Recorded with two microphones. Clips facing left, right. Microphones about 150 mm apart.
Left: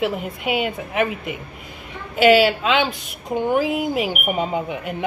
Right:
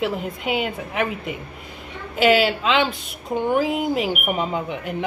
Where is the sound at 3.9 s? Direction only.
15° left (ahead or behind).